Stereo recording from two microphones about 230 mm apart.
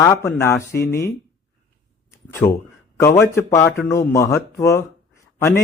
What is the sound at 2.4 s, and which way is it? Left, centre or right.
A man's voice, centre.